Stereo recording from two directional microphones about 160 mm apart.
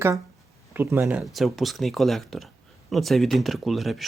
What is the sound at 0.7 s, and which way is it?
Speech, 15° right (ahead or behind).